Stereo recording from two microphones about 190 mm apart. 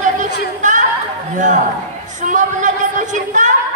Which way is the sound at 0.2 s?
40° right (ahead or behind).